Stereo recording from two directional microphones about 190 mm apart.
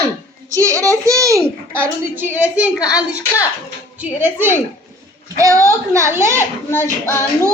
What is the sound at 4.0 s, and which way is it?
A woman's voice, 10° right (ahead or behind).